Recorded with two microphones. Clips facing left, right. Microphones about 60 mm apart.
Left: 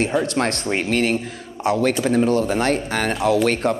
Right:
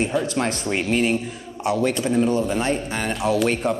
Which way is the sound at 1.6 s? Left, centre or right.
Left.